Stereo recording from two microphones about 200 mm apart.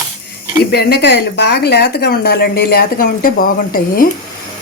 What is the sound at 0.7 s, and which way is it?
Speech, 55° left (ahead or behind).